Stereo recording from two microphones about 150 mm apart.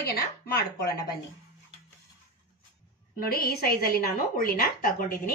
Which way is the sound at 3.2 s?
85° left.